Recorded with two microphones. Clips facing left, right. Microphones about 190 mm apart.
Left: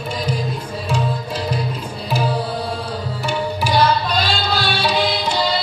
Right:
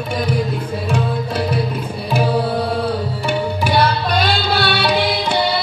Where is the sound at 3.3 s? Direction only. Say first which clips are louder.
Right 2 dB; 60° right (ahead or behind).